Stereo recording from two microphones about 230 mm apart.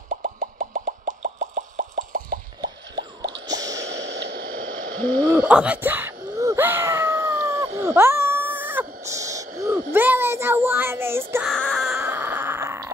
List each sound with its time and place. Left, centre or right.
0.1 s plop: right
3.4 s squish: centre
3.7 s static: right
5.3 s a sound: centre
9.9 s speech: centre
11.5 s a sound: centre